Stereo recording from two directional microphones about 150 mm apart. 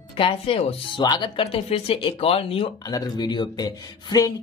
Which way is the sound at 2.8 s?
25° left (ahead or behind).